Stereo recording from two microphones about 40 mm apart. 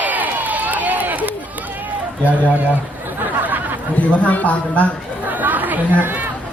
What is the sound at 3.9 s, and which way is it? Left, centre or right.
Speech, left.